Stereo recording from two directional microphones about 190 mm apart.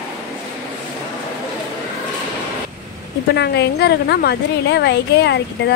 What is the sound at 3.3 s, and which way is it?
A woman's voice, 60° left (ahead or behind).